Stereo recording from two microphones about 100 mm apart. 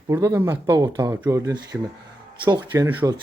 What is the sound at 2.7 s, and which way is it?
Speech, 25° right (ahead or behind).